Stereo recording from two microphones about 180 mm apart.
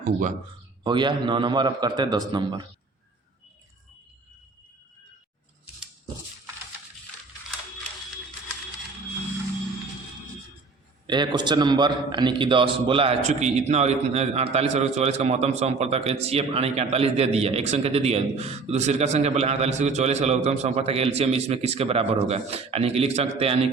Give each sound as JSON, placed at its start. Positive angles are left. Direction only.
{"t": 0.9, "sound": "a man's voice", "side_deg": -25}
{"t": 11.0, "sound": "a man's voice", "side_deg": -25}